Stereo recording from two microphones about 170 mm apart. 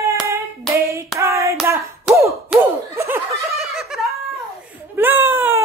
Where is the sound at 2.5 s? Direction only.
5° right (ahead or behind).